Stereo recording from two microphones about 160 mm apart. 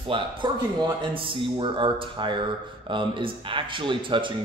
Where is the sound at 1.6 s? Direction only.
30° right (ahead or behind).